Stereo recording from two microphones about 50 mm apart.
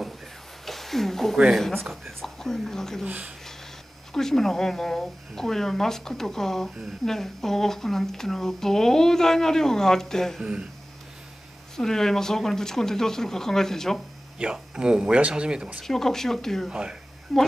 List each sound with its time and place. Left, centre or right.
0.7 s a sound: centre
1.9 s speech: centre
4.1 s speech: centre
10.4 s speech: right
11.7 s speech: centre
14.4 s speech: centre
15.8 s speech: centre